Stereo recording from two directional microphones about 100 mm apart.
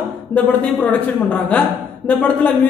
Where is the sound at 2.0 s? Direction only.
10° left (ahead or behind).